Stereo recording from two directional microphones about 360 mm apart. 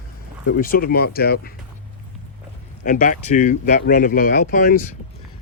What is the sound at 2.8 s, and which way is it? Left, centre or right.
Speech, left.